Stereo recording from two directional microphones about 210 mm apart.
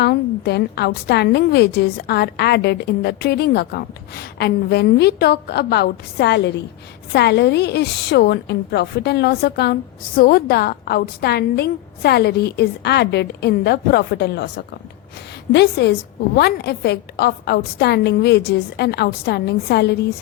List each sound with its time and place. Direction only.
0.0 s a woman's voice: 50° left (ahead or behind)